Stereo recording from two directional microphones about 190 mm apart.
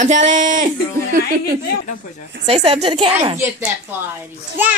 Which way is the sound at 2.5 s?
30° right (ahead or behind).